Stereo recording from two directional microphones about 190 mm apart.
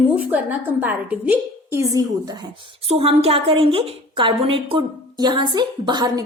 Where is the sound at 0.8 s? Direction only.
10° right (ahead or behind).